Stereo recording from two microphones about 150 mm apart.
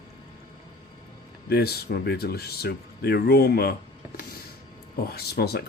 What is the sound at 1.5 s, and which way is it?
Speech, 90° left.